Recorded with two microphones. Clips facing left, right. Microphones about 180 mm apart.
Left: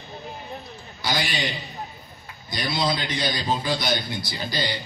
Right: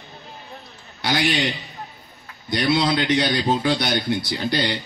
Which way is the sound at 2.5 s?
65° right (ahead or behind).